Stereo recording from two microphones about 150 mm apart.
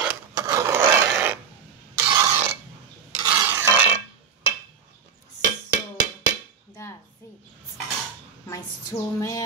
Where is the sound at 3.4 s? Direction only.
15° right (ahead or behind).